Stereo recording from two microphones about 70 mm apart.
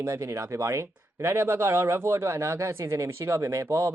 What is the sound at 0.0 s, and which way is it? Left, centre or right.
Speech, right.